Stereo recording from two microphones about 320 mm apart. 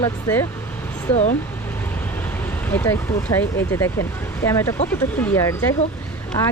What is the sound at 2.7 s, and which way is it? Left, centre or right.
Speech, centre.